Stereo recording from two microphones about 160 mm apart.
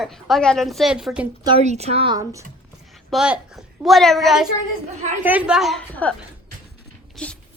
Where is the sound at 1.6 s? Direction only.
45° right (ahead or behind).